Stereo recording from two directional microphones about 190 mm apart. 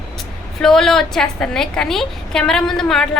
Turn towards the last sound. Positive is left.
turn(degrees=5)  # may be behind; listen again after turning